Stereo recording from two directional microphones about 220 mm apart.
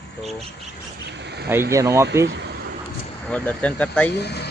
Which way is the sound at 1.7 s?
15° right (ahead or behind).